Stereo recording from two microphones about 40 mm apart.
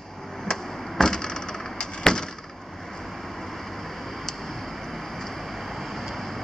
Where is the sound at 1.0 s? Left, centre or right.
Centre.